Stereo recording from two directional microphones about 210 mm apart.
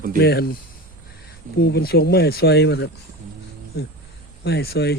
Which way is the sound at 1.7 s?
50° left (ahead or behind).